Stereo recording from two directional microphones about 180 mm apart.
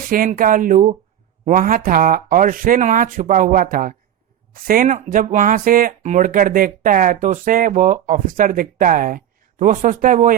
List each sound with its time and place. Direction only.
0.1 s speech: 50° right (ahead or behind)